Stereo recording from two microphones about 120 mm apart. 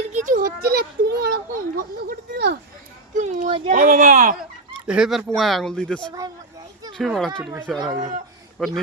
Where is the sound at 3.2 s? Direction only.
90° right.